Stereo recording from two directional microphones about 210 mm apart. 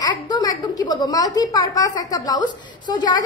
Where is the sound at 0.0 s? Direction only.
20° left (ahead or behind).